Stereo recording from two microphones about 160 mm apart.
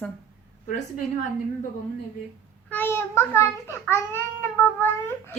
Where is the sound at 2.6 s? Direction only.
10° left (ahead or behind).